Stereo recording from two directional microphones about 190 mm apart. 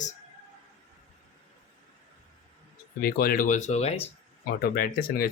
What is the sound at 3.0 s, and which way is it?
Speech, 50° left (ahead or behind).